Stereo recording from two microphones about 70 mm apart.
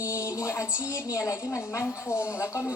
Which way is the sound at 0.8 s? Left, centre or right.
Left.